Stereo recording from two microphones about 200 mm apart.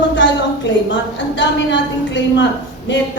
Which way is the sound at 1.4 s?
65° left (ahead or behind).